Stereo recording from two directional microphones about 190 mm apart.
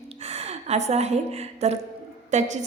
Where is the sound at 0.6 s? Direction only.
35° right (ahead or behind).